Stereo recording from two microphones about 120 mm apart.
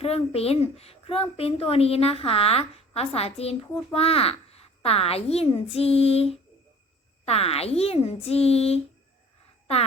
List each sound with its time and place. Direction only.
0.0 s speech: 55° left (ahead or behind)